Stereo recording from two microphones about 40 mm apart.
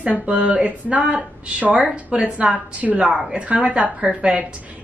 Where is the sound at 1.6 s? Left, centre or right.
Right.